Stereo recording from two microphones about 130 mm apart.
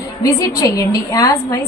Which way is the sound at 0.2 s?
25° left (ahead or behind).